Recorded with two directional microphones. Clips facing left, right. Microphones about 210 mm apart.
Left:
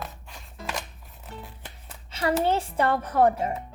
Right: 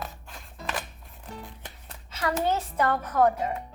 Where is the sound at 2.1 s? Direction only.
30° left (ahead or behind).